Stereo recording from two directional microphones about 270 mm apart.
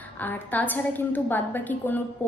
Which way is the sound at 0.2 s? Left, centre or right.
Centre.